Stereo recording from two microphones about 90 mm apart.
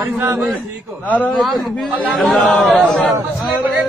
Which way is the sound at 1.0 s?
15° left (ahead or behind).